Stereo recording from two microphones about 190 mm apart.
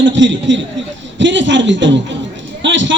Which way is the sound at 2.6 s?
75° right (ahead or behind).